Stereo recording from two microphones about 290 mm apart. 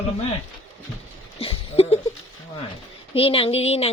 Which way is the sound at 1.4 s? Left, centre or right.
Centre.